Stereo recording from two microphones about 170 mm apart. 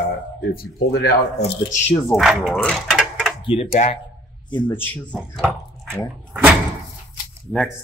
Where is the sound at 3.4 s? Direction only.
30° left (ahead or behind).